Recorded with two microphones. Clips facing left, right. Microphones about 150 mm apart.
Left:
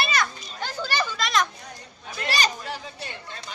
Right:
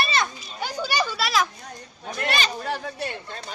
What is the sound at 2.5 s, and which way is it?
Speech, 55° right (ahead or behind).